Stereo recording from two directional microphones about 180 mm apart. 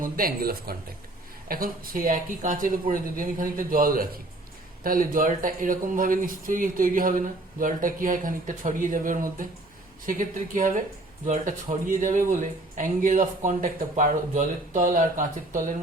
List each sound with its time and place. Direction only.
0.0 s speech: 55° right (ahead or behind)